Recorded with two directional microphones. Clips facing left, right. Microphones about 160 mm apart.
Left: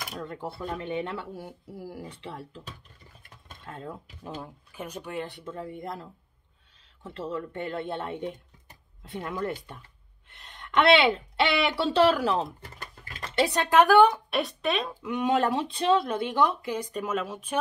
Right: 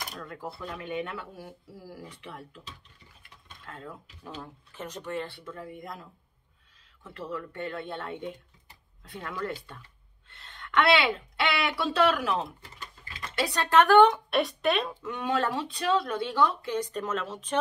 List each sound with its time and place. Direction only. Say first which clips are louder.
0.2 s speech: left 6 dB; 25° left (ahead or behind)
3.6 s speech: left 4 dB; 25° left (ahead or behind)
12.6 s sewing machine: left 3 dB; 50° left (ahead or behind)
13.4 s speech: left 2 dB; 20° left (ahead or behind); by 15.0 s centre (ahead or behind)
15.0 s speech: left 6 dB; 15° left (ahead or behind)